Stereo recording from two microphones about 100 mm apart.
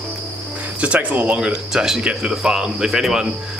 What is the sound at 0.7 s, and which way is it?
Speech, 15° right (ahead or behind).